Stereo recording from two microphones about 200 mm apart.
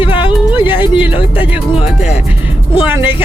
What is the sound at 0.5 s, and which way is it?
Music, 10° right (ahead or behind).